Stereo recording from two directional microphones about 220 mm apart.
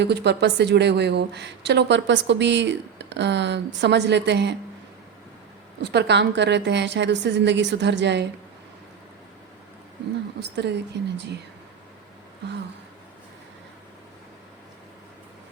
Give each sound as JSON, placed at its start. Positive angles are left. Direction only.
{"t": 0.0, "sound": "a woman's voice", "side_deg": -50}
{"t": 5.8, "sound": "a woman's voice", "side_deg": -50}
{"t": 10.5, "sound": "a woman's voice", "side_deg": -50}